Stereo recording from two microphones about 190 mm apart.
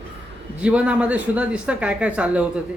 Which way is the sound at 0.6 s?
5° right (ahead or behind).